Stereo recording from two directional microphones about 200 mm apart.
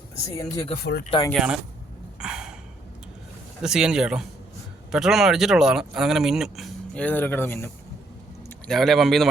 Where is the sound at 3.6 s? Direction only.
5° right (ahead or behind).